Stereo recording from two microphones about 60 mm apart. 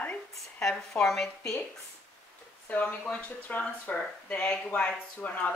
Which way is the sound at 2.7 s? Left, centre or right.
Left.